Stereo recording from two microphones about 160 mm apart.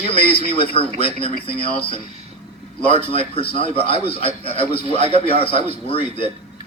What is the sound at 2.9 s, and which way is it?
Speech, 35° left (ahead or behind).